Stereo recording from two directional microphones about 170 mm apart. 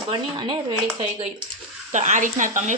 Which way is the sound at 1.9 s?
45° right (ahead or behind).